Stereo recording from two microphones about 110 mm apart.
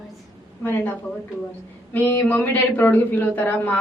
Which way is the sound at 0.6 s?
15° left (ahead or behind).